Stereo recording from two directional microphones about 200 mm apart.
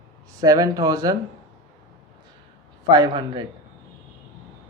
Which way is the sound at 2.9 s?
20° right (ahead or behind).